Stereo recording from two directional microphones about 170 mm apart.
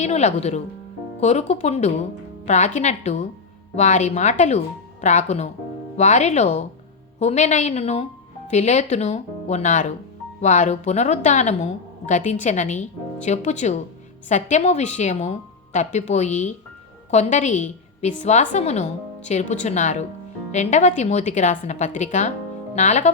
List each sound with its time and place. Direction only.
0.0 s a woman's voice: 40° left (ahead or behind)